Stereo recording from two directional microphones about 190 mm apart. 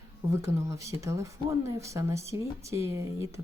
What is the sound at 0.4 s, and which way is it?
Speech, 15° right (ahead or behind).